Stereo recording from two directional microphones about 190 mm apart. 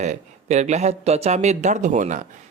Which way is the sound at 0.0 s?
40° right (ahead or behind).